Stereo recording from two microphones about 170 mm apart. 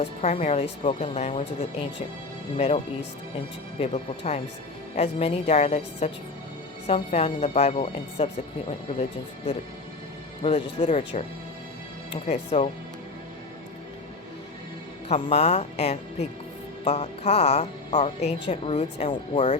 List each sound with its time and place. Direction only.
0.0 s speech: 40° left (ahead or behind)
2.6 s speech: 40° left (ahead or behind)
10.4 s speech: 40° left (ahead or behind)
12.2 s speech: 40° left (ahead or behind)
15.1 s speech: 40° left (ahead or behind)